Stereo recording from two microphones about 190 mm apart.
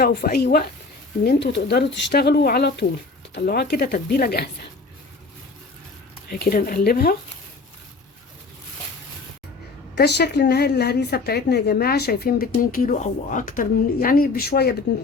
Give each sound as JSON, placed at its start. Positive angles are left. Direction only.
{"t": 0.0, "sound": "a woman's voice", "side_deg": 55}
{"t": 6.3, "sound": "speech", "side_deg": 50}
{"t": 9.9, "sound": "a woman's voice", "side_deg": 60}